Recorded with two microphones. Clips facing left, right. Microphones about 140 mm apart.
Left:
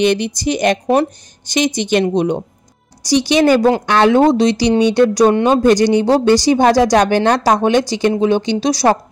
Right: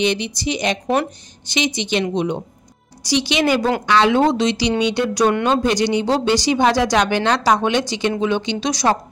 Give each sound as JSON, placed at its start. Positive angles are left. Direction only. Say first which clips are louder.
{"t": 0.0, "sound": "a woman's voice", "louder": "left 5 dB", "side_deg": 50}
{"t": 4.3, "sound": "a woman's voice", "louder": "left 6 dB", "side_deg": 40}